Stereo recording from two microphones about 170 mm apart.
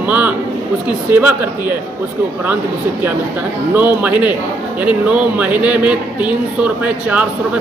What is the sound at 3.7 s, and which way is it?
A man's voice, 10° right (ahead or behind).